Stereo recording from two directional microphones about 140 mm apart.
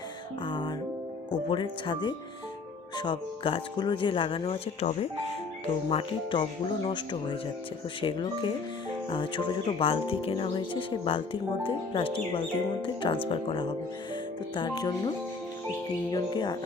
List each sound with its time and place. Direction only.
0.4 s music: 35° left (ahead or behind)
1.3 s speech: 35° left (ahead or behind)
16.1 s speech: 30° left (ahead or behind)